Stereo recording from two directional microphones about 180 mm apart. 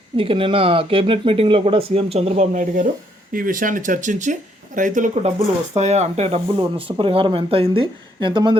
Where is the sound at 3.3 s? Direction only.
50° right (ahead or behind).